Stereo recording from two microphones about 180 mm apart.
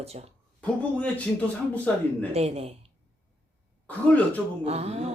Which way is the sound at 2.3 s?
35° right (ahead or behind).